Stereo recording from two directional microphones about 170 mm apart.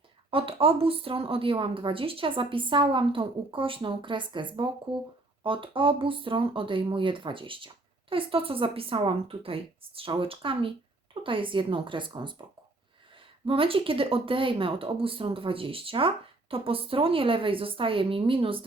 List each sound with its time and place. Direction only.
0.3 s a woman's voice: 30° right (ahead or behind)